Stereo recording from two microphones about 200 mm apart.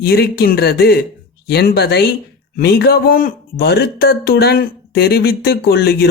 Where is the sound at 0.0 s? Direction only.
50° left (ahead or behind).